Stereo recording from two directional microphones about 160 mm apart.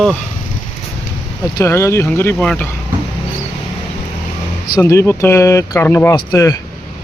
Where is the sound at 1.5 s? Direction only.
15° left (ahead or behind).